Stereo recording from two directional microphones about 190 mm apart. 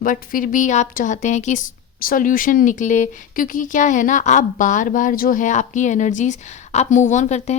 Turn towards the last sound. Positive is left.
turn(degrees=35)  # may be behind; listen again after turning